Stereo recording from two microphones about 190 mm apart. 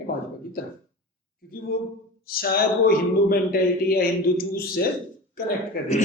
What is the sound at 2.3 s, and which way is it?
A man's voice, 50° left (ahead or behind).